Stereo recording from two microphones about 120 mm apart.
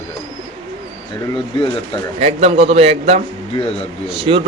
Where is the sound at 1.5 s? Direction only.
45° left (ahead or behind).